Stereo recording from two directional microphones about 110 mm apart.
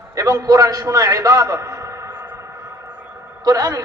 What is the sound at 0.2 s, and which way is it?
A man's voice, 35° right (ahead or behind).